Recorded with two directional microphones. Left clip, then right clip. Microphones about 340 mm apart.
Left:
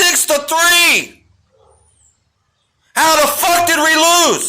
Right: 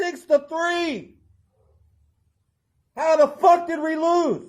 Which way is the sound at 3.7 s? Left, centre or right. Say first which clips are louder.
Left 11 dB; left.